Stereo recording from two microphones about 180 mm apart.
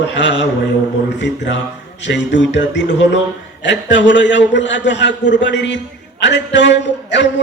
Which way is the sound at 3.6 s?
75° left (ahead or behind).